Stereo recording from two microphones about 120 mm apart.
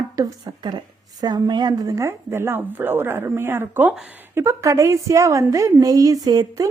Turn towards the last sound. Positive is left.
turn(degrees=-30)  # may be behind; listen again after turning